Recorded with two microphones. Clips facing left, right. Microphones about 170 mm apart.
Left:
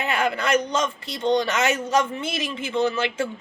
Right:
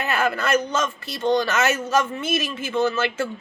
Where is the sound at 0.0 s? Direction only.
15° left (ahead or behind).